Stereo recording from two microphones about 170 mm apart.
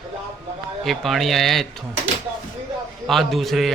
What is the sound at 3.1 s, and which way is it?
Speech, centre (ahead or behind).